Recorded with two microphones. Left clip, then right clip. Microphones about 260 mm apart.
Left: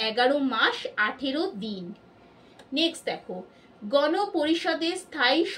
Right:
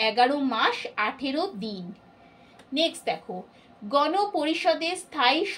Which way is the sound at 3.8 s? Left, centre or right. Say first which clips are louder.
Even; right.